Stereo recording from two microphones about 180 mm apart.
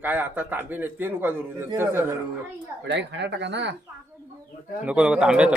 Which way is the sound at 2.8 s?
75° right (ahead or behind).